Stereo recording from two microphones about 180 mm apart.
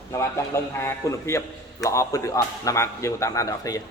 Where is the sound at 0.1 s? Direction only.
15° left (ahead or behind).